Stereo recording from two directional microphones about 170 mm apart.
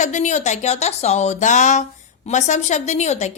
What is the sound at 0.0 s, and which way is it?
A woman's voice, 45° left (ahead or behind).